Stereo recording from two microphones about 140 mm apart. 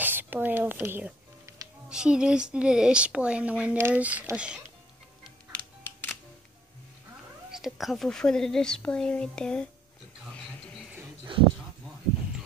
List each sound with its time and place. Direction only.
0.0 s music: 15° right (ahead or behind)
1.9 s speech: 5° right (ahead or behind)
5.5 s music: 10° left (ahead or behind)
7.5 s a woman's voice: centre (ahead or behind)
11.3 s speech: 35° right (ahead or behind)